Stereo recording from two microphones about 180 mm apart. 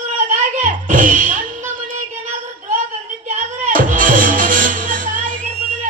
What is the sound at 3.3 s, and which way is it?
Music, 45° right (ahead or behind).